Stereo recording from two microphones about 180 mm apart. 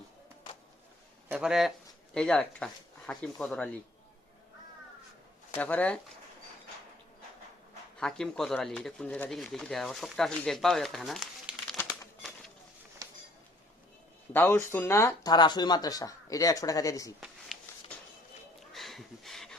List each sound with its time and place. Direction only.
1.3 s speech: 5° right (ahead or behind)
5.5 s speech: 10° left (ahead or behind)
7.9 s speech: 5° left (ahead or behind)
14.3 s speech: 10° left (ahead or behind)
17.2 s a sound: centre (ahead or behind)
18.7 s a sound: centre (ahead or behind)